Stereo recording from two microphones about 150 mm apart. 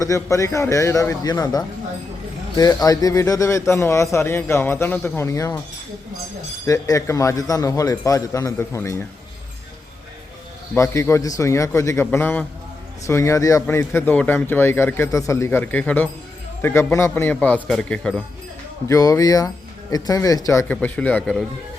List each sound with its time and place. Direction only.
0.0 s a man's voice: 20° left (ahead or behind)
6.7 s a man's voice: 20° left (ahead or behind)
10.8 s a man's voice: 20° left (ahead or behind)
18.9 s a man's voice: 20° left (ahead or behind)
20.7 s speech: 10° left (ahead or behind)